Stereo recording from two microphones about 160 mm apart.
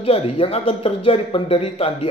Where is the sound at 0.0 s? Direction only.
35° left (ahead or behind).